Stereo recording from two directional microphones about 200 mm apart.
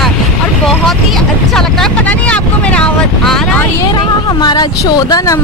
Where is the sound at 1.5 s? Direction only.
5° left (ahead or behind).